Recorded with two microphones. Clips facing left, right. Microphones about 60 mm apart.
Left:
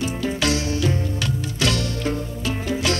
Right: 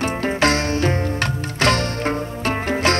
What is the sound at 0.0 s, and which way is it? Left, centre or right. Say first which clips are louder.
Music: right 4 dB; right.